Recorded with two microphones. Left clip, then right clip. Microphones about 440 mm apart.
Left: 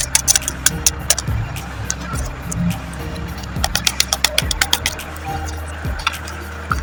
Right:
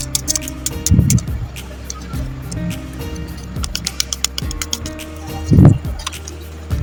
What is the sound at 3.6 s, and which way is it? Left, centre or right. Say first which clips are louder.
Music: left 5 dB; right.